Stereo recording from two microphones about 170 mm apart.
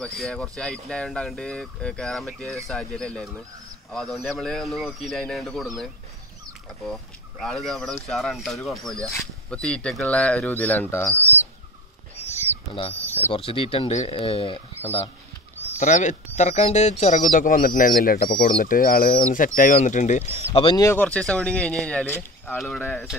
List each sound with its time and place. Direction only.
0.0 s speech: centre (ahead or behind)
6.9 s speech: centre (ahead or behind)
13.3 s speech: 35° left (ahead or behind)
15.8 s speech: 45° left (ahead or behind)
20.5 s speech: 30° left (ahead or behind)
20.8 s speech: 10° left (ahead or behind)